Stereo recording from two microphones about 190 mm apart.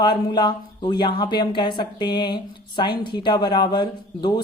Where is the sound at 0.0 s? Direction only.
25° left (ahead or behind).